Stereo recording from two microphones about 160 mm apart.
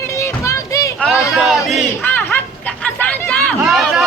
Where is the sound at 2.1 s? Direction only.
10° left (ahead or behind).